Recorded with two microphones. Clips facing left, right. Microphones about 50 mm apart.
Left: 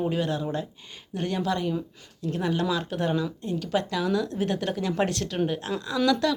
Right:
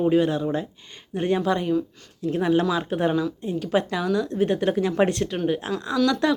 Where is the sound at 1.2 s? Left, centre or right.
Centre.